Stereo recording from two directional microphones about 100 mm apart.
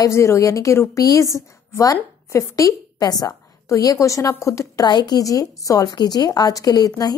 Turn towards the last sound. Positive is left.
turn(degrees=40)  # may be behind; listen again after turning